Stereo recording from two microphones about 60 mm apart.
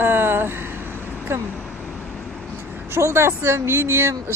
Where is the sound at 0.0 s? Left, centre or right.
Right.